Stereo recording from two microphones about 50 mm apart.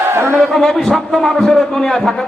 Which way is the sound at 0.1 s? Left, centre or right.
Right.